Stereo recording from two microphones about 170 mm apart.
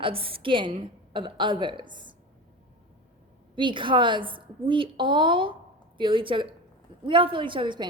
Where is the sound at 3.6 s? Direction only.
30° right (ahead or behind).